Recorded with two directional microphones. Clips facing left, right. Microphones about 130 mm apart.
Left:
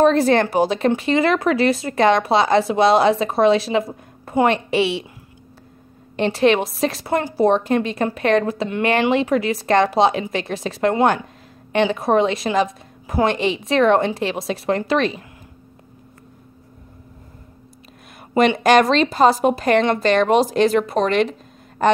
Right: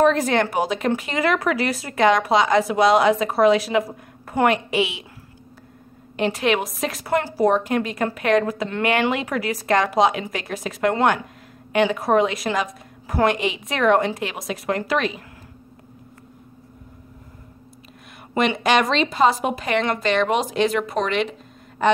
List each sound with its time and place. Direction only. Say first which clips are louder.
0.0 s speech: left 3 dB; 35° left (ahead or behind)
6.1 s speech: left 4 dB; 30° left (ahead or behind)
18.3 s speech: left 5 dB; 35° left (ahead or behind)